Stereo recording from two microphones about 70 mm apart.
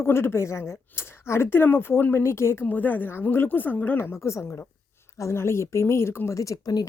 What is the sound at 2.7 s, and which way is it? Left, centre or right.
A woman's voice, left.